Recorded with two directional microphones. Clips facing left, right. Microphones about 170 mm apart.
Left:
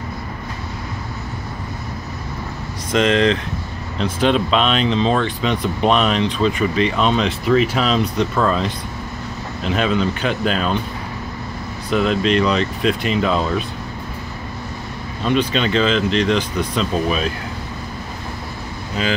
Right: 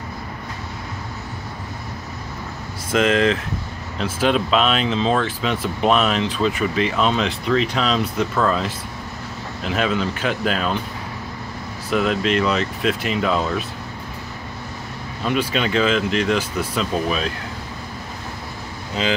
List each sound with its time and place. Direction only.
2.9 s speech: 5° right (ahead or behind)
11.9 s speech: 5° right (ahead or behind)
15.2 s speech: 5° right (ahead or behind)
19.0 s speech: 20° right (ahead or behind)